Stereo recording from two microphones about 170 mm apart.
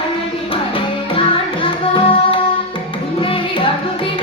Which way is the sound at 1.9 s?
30° left (ahead or behind).